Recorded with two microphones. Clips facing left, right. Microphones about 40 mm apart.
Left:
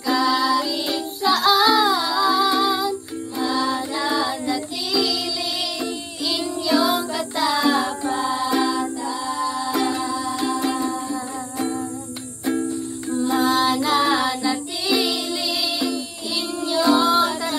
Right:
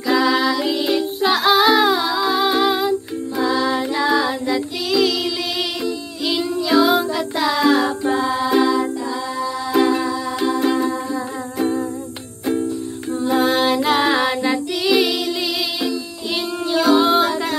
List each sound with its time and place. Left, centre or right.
0.0 s music: right
0.8 s music: right
9.7 s music: right
13.3 s music: right
16.9 s music: right